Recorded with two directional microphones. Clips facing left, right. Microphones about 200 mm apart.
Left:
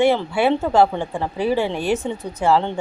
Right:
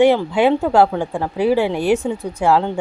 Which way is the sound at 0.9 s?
5° right (ahead or behind).